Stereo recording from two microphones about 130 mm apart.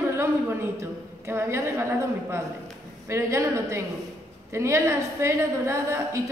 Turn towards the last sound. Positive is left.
turn(degrees=-20)  # may be behind; listen again after turning